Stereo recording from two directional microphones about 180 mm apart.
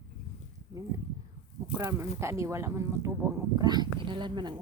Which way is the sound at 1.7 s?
15° right (ahead or behind).